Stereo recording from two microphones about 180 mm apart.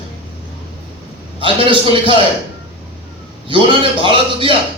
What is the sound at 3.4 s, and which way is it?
A man's voice, 30° right (ahead or behind).